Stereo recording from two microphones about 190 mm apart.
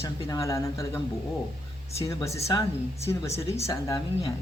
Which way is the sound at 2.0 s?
15° left (ahead or behind).